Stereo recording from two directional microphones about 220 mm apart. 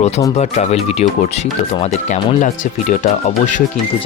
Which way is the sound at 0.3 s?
30° left (ahead or behind).